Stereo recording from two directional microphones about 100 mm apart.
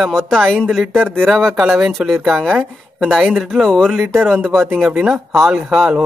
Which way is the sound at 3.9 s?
10° right (ahead or behind).